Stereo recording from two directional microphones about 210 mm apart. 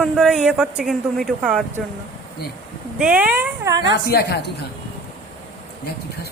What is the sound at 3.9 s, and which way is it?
Speech, 50° left (ahead or behind).